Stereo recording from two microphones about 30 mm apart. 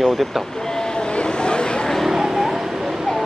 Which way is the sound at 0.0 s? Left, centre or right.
Centre.